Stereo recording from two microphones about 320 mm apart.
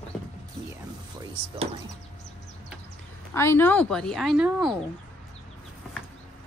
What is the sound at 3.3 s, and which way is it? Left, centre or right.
A woman's voice, centre.